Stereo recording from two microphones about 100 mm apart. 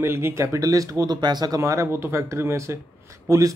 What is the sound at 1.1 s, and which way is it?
Speech, 45° right (ahead or behind).